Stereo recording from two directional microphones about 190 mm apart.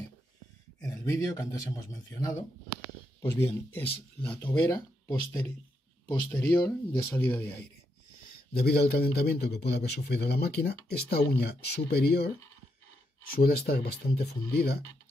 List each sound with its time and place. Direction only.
0.7 s a man's voice: 15° left (ahead or behind)
7.2 s speech: 10° left (ahead or behind)
8.5 s a man's voice: 55° left (ahead or behind)
13.3 s a man's voice: 55° left (ahead or behind)